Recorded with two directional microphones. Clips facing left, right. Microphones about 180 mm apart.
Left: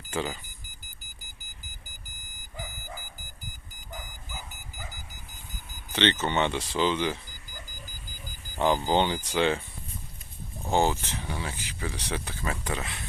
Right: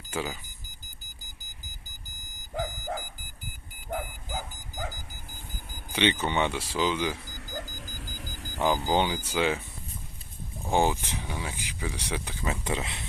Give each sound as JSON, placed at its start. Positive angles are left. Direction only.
{"t": 0.1, "sound": "speech", "side_deg": -10}
{"t": 2.5, "sound": "dog", "side_deg": -85}
{"t": 3.8, "sound": "bow-wow", "side_deg": -90}
{"t": 5.9, "sound": "speech", "side_deg": -10}
{"t": 7.5, "sound": "alarm clock", "side_deg": -90}
{"t": 8.6, "sound": "speech", "side_deg": -10}
{"t": 10.7, "sound": "speech", "side_deg": -15}